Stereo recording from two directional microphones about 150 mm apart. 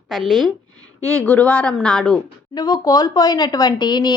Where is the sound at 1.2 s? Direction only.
10° left (ahead or behind).